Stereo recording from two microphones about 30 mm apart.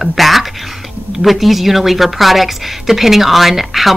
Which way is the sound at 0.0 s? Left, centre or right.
Centre.